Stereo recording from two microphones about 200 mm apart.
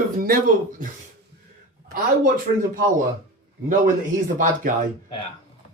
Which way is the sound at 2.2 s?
45° right (ahead or behind).